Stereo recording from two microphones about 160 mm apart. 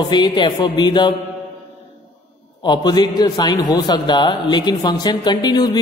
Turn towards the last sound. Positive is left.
turn(degrees=25)  # may be behind; listen again after turning